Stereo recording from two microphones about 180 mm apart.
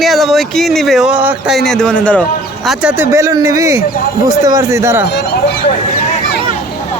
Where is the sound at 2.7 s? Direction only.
10° right (ahead or behind).